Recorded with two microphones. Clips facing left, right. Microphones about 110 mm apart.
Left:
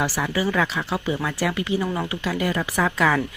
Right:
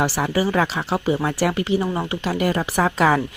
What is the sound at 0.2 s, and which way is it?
Speech, 30° right (ahead or behind).